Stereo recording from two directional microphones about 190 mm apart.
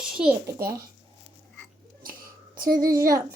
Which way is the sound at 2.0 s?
50° right (ahead or behind).